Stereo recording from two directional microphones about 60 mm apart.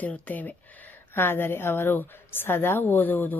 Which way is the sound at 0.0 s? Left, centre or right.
Left.